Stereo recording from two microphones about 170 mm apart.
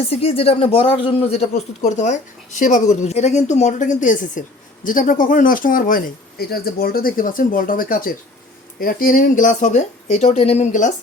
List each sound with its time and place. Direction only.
0.0 s speech: 35° left (ahead or behind)